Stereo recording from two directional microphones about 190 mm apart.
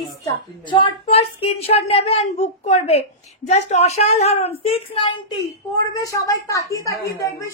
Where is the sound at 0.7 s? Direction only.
30° left (ahead or behind).